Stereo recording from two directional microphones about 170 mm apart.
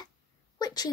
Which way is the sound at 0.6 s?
25° left (ahead or behind).